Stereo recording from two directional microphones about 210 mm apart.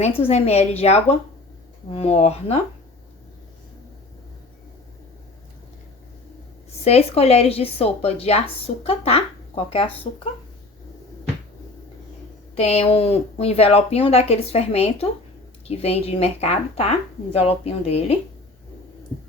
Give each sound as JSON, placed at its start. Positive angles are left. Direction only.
{"t": 0.0, "sound": "a woman's voice", "side_deg": 30}
{"t": 6.8, "sound": "speech", "side_deg": 30}
{"t": 12.5, "sound": "speech", "side_deg": 30}